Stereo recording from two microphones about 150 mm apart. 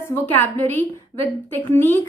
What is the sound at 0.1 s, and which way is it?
A woman's voice, 15° left (ahead or behind).